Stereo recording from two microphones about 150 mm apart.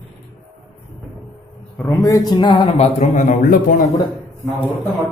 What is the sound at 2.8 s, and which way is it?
A man's voice, 55° left (ahead or behind).